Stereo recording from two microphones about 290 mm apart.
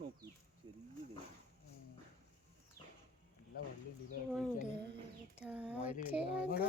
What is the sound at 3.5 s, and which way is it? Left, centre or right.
Speech, left.